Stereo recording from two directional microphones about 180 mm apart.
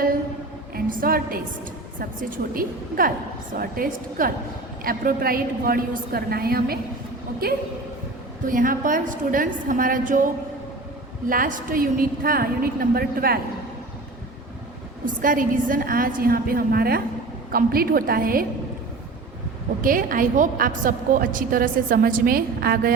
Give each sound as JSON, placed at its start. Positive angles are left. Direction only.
{"t": 0.7, "sound": "a woman's voice", "side_deg": -55}
{"t": 8.4, "sound": "a woman's voice", "side_deg": -50}
{"t": 11.3, "sound": "a woman's voice", "side_deg": -50}
{"t": 15.0, "sound": "a woman's voice", "side_deg": -50}
{"t": 19.8, "sound": "a woman's voice", "side_deg": -50}